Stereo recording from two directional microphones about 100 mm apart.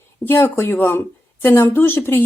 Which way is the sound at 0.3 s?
25° left (ahead or behind).